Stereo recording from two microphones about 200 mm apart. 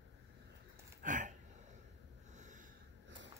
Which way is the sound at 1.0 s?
40° right (ahead or behind).